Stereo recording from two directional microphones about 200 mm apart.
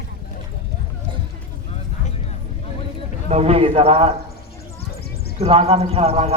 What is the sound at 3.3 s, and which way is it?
Speech, 30° right (ahead or behind).